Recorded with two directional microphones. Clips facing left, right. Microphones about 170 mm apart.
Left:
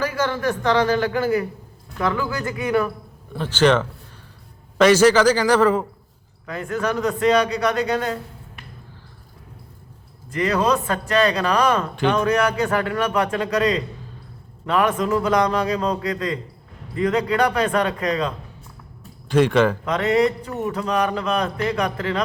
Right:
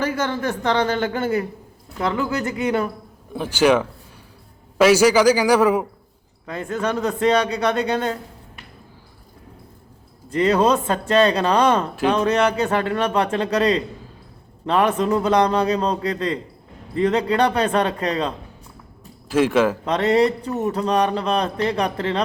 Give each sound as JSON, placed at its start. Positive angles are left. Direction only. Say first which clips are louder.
{"t": 0.0, "sound": "a man's voice", "louder": "even", "side_deg": -25}
{"t": 3.3, "sound": "a man's voice", "louder": "right 1 dB", "side_deg": -10}
{"t": 6.4, "sound": "a man's voice", "louder": "even", "side_deg": -25}
{"t": 10.3, "sound": "a man's voice", "louder": "right 3 dB", "side_deg": -30}
{"t": 19.3, "sound": "speech", "louder": "left 1 dB", "side_deg": -5}
{"t": 19.8, "sound": "speech", "louder": "right 1 dB", "side_deg": -30}